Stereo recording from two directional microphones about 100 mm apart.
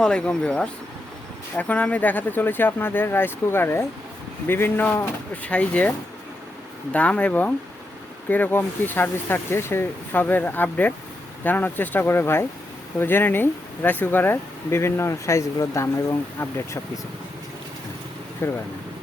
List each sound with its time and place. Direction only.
0.0 s speech: 10° left (ahead or behind)
6.9 s speech: 15° left (ahead or behind)
18.4 s speech: 25° left (ahead or behind)